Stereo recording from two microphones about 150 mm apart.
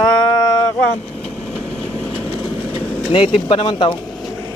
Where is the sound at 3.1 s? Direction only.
35° left (ahead or behind).